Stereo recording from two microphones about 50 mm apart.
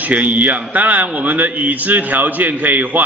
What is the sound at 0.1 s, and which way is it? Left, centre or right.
A man's voice, right.